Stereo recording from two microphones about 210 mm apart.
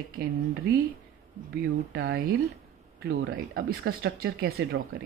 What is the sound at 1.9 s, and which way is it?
Speech, 50° right (ahead or behind).